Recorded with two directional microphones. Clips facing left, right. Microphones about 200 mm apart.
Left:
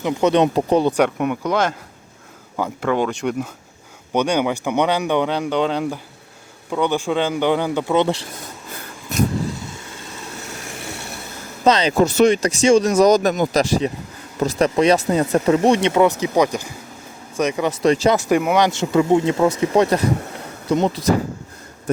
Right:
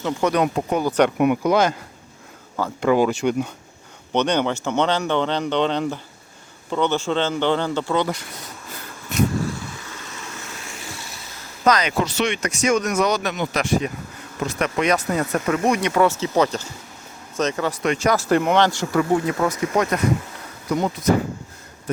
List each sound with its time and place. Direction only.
0.0 s speech: 20° left (ahead or behind)
1.2 s speech: 10° right (ahead or behind)
2.8 s speech: 5° right (ahead or behind)
4.1 s speech: 10° left (ahead or behind); by 8.3 s 30° left (ahead or behind)
10.9 s a sound: 60° left (ahead or behind)
11.6 s speech: 30° left (ahead or behind)
12.0 s speech: 45° left (ahead or behind); by 13.1 s 30° left (ahead or behind)
13.1 s speech: 40° left (ahead or behind); by 17.7 s 15° left (ahead or behind)
17.8 s speech: 30° left (ahead or behind)
18.2 s speech: 10° left (ahead or behind)
18.7 s speech: 20° left (ahead or behind)